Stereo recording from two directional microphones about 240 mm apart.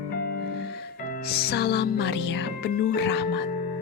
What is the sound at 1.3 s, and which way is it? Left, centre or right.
Speech, left.